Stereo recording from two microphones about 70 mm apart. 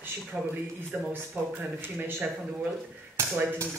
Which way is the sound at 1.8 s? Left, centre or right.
Right.